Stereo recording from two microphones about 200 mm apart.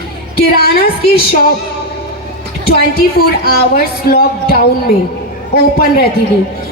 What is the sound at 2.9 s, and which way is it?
A woman's voice, 50° left (ahead or behind).